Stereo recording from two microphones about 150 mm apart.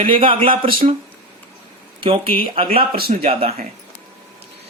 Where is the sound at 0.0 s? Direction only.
35° right (ahead or behind).